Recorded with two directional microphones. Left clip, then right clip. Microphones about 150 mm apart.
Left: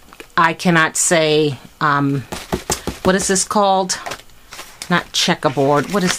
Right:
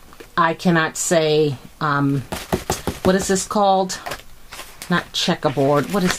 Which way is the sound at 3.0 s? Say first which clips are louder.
Left 2 dB; 20° left (ahead or behind).